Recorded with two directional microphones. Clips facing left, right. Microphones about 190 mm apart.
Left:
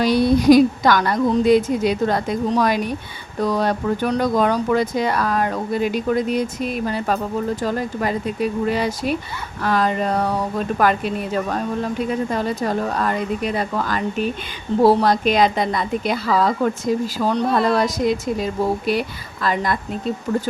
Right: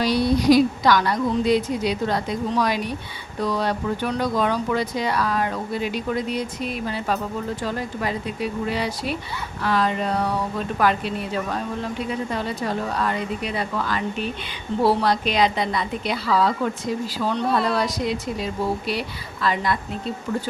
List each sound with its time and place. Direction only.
0.0 s a woman's voice: 50° left (ahead or behind)